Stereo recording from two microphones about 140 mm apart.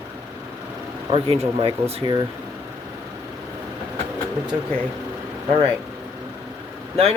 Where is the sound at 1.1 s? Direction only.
45° right (ahead or behind).